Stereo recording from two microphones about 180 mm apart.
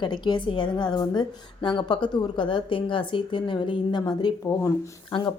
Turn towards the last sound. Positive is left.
turn(degrees=25)  # may be behind; listen again after turning